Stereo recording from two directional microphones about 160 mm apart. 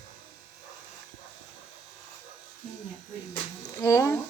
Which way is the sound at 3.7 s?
20° left (ahead or behind).